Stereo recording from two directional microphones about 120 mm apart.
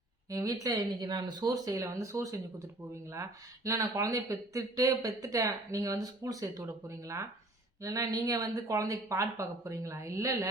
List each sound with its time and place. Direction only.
0.3 s speech: 30° right (ahead or behind)